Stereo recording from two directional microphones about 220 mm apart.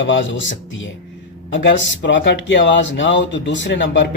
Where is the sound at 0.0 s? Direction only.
55° left (ahead or behind).